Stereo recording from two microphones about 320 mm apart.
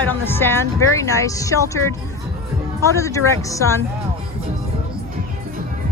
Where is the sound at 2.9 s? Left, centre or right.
Centre.